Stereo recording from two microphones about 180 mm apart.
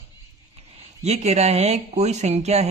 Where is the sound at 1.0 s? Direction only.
35° right (ahead or behind).